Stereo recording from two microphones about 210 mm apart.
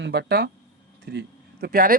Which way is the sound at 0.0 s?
55° right (ahead or behind).